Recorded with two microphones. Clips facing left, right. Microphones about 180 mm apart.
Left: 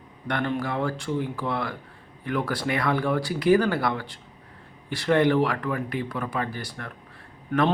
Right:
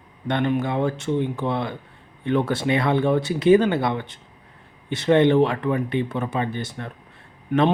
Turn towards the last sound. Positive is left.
turn(degrees=-20)  # may be behind; listen again after turning